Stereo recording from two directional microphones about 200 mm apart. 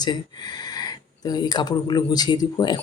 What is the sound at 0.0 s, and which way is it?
Speech, 20° left (ahead or behind).